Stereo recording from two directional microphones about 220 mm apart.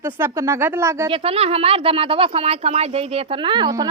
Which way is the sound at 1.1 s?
25° right (ahead or behind).